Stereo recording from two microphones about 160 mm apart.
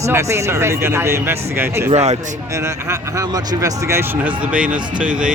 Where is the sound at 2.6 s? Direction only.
20° right (ahead or behind).